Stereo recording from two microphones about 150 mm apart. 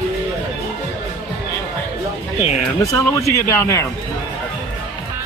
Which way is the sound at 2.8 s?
20° left (ahead or behind).